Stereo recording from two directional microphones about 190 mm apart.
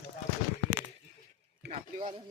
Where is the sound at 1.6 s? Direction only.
35° right (ahead or behind).